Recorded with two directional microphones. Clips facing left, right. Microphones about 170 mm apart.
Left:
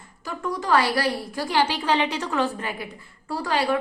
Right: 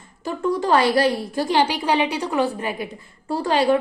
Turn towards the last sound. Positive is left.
turn(degrees=-25)  # may be behind; listen again after turning